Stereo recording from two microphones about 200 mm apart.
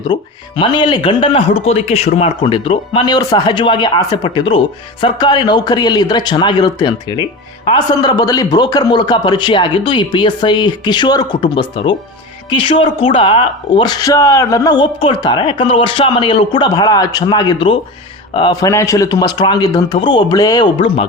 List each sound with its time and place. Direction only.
0.1 s speech: 20° left (ahead or behind)